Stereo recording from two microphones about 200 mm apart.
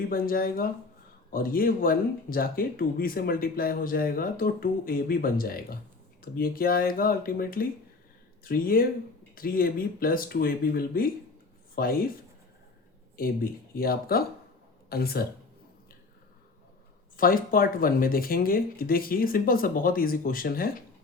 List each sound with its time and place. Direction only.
0.1 s speech: 45° left (ahead or behind)
13.1 s speech: 45° left (ahead or behind)
17.2 s speech: 45° left (ahead or behind)